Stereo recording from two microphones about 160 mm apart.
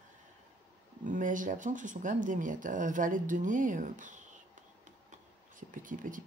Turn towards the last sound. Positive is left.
turn(degrees=-55)  # may be behind; listen again after turning